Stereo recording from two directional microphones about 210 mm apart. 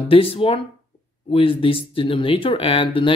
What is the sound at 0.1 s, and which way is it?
Speech, 25° left (ahead or behind).